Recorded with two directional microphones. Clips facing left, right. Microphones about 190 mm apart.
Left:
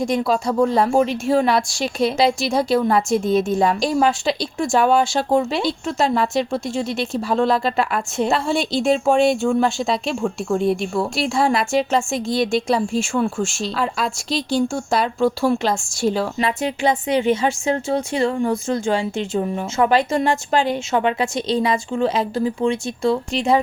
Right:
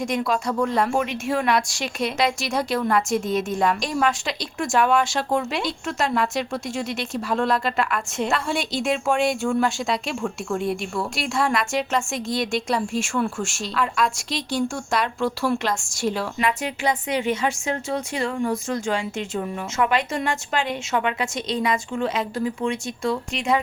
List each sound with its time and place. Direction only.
0.0 s a woman's voice: 30° left (ahead or behind)